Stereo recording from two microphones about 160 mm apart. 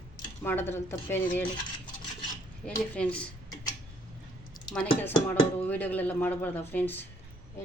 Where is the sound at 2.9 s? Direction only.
10° left (ahead or behind).